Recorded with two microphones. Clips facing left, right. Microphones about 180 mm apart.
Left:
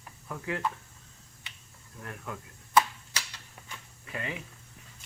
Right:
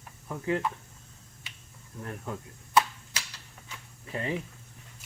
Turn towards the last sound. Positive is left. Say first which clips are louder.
# right 5 dB
turn(degrees=-30)  # may be behind; listen again after turning